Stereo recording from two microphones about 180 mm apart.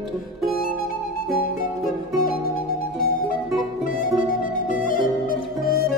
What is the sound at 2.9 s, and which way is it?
Music, 50° left (ahead or behind).